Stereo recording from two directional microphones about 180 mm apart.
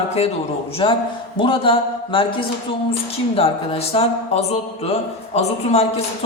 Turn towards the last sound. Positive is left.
turn(degrees=35)  # may be behind; listen again after turning